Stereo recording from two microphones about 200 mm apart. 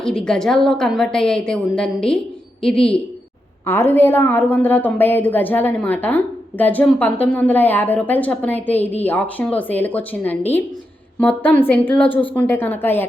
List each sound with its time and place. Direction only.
0.0 s a woman's voice: 5° left (ahead or behind)